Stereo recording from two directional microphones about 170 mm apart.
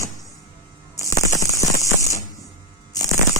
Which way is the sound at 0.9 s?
20° left (ahead or behind).